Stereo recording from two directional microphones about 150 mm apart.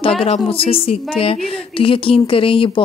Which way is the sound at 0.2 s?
40° left (ahead or behind).